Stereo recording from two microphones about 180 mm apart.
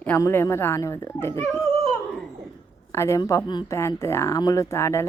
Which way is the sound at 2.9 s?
15° left (ahead or behind).